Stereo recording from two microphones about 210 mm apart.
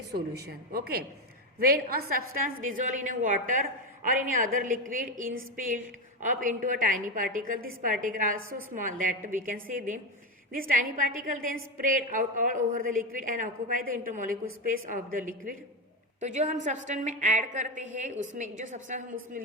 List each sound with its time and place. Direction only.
0.1 s a woman's voice: 50° right (ahead or behind)
16.2 s a woman's voice: 35° right (ahead or behind)